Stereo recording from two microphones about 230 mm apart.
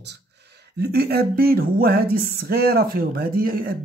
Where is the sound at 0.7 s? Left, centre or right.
Right.